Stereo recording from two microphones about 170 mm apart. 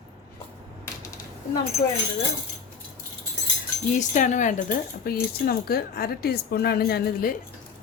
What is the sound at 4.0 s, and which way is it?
Speech, 45° left (ahead or behind).